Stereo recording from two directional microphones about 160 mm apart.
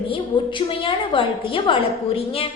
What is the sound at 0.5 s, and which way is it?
A woman's voice, 30° left (ahead or behind).